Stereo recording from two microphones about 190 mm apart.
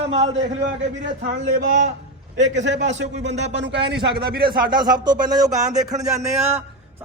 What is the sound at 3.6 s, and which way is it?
A man's voice, 65° right (ahead or behind).